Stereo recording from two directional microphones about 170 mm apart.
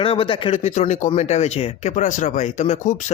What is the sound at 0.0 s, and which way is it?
Speech, 30° left (ahead or behind).